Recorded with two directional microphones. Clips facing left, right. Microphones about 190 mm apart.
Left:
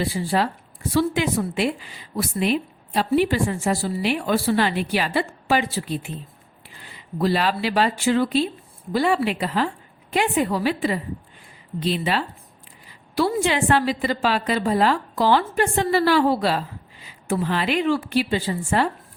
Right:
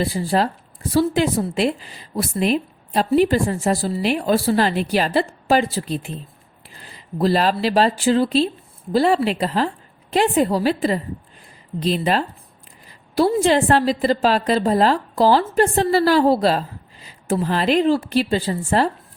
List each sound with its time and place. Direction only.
0.0 s a woman's voice: 40° right (ahead or behind)